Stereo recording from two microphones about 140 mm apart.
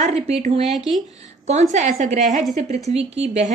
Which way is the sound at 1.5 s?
55° right (ahead or behind).